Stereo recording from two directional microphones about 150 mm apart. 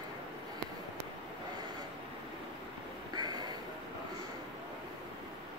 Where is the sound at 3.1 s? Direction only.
30° right (ahead or behind).